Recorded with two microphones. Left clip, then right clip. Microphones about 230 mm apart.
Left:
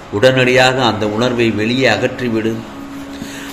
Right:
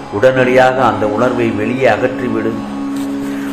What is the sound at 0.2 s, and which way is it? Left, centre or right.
A man's voice, left.